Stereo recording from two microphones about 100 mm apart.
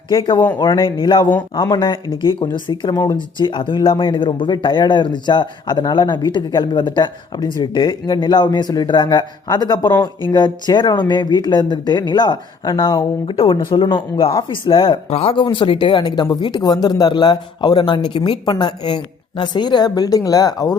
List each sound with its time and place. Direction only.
0.1 s speech: 55° left (ahead or behind)
2.0 s speech: 40° right (ahead or behind)
2.4 s speech: 55° left (ahead or behind)
2.9 s a woman's voice: 35° left (ahead or behind)
3.4 s speech: 55° left (ahead or behind)
15.4 s a woman's voice: 50° left (ahead or behind)